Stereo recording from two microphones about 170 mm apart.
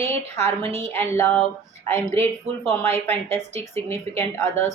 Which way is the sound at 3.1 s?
15° left (ahead or behind).